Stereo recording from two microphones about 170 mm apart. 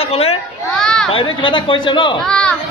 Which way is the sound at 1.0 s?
30° left (ahead or behind).